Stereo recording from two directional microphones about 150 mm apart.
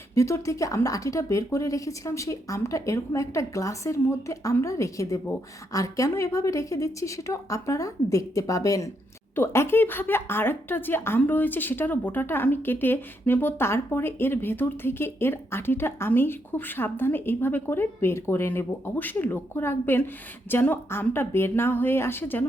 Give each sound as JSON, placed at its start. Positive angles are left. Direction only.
{"t": 0.1, "sound": "speech", "side_deg": 20}